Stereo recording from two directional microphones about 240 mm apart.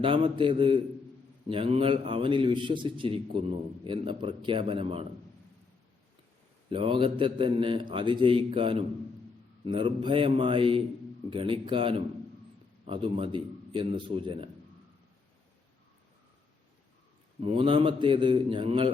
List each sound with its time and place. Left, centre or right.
0.0 s a man's voice: right
6.7 s a man's voice: right
17.4 s a man's voice: right